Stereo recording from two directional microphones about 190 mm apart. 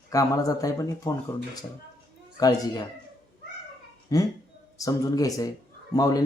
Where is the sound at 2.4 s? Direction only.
20° left (ahead or behind).